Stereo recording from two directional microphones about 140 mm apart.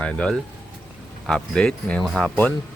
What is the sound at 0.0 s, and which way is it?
Speech, 10° left (ahead or behind).